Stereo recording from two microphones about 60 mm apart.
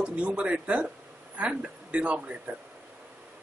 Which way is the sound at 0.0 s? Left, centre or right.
Centre.